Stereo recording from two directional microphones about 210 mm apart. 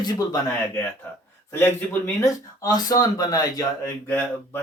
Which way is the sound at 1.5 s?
10° left (ahead or behind).